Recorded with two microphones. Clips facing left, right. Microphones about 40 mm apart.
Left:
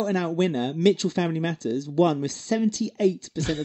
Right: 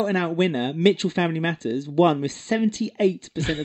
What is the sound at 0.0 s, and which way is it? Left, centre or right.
Speech, right.